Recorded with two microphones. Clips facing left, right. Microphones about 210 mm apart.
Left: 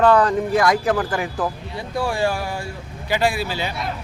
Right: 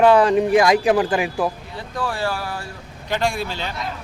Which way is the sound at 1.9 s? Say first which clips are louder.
Left 3 dB; 10° left (ahead or behind).